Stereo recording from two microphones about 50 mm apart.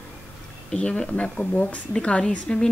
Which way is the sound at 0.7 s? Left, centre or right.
Centre.